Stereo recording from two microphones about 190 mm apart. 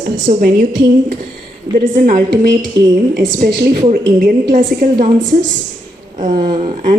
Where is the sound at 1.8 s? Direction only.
45° right (ahead or behind).